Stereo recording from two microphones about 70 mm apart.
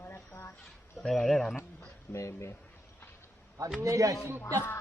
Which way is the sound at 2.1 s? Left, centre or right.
Left.